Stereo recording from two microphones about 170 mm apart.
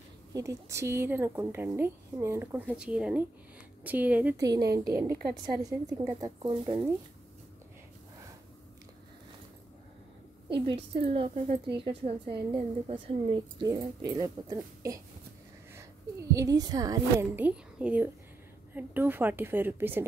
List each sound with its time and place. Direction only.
0.3 s a woman's voice: 20° right (ahead or behind)
4.4 s a woman's voice: 20° right (ahead or behind)
10.5 s a woman's voice: 30° right (ahead or behind)
17.4 s a woman's voice: 5° right (ahead or behind)